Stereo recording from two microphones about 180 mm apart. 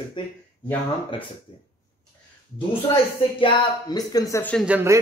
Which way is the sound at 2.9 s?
25° left (ahead or behind).